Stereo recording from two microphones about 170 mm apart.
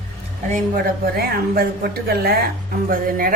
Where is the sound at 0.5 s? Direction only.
60° right (ahead or behind).